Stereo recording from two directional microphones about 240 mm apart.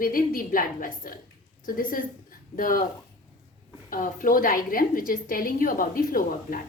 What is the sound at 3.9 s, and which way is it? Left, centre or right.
A woman's voice, left.